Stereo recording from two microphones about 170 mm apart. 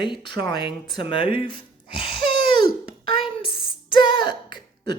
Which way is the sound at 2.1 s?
70° right (ahead or behind).